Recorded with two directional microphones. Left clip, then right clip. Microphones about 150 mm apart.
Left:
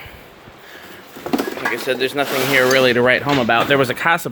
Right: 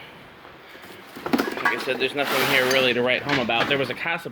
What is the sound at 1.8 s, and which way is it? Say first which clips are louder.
Speech: left 5 dB; 60° left (ahead or behind).